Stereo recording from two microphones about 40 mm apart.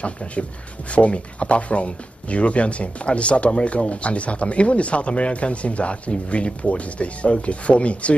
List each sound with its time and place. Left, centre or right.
0.0 s speech: left